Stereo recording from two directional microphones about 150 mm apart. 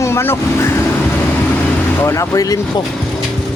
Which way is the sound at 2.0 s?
20° left (ahead or behind).